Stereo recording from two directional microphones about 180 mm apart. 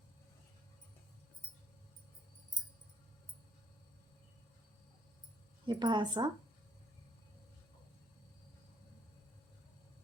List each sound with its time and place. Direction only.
5.6 s speech: 25° right (ahead or behind)